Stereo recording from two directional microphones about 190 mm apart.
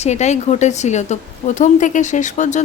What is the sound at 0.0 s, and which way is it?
Speech, 35° left (ahead or behind).